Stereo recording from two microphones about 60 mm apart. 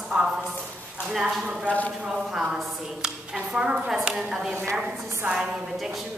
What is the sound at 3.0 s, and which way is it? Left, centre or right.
A woman's voice, centre.